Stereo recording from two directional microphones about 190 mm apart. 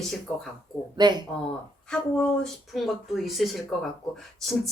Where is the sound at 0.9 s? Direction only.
25° right (ahead or behind).